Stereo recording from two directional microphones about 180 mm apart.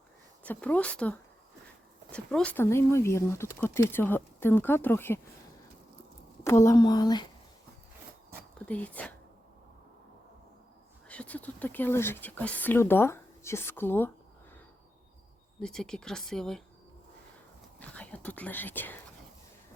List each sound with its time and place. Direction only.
0.4 s speech: 10° left (ahead or behind)
6.4 s speech: 15° left (ahead or behind)
8.5 s speech: 5° left (ahead or behind)
11.1 s speech: 10° left (ahead or behind)
15.6 s speech: 5° left (ahead or behind)
17.7 s whispering: 10° left (ahead or behind)